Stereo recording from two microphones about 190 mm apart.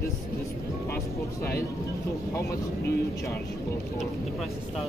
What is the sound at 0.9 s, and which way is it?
Speech, 55° left (ahead or behind).